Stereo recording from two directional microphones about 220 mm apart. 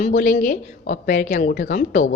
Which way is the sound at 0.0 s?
35° left (ahead or behind).